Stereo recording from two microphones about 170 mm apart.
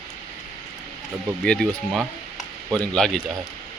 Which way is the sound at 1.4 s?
5° left (ahead or behind).